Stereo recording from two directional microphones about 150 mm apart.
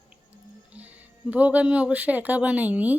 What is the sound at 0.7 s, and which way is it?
Speech, 10° right (ahead or behind).